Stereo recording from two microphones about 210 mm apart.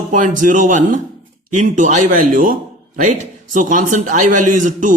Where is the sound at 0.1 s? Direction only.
40° right (ahead or behind).